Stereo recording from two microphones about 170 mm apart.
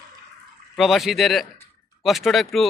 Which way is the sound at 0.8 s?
Centre (ahead or behind).